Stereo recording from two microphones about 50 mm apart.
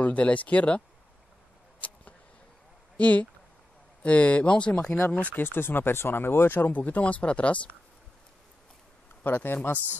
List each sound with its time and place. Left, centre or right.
0.0 s speech: left
3.0 s speech: left
5.1 s speech: left
6.7 s speech: left
9.2 s speech: left